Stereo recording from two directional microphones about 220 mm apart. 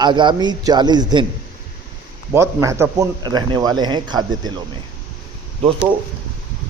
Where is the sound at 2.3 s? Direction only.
15° right (ahead or behind).